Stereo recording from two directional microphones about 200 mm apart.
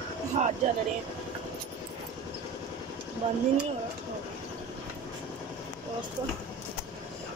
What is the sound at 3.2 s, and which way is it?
Speech, 30° right (ahead or behind).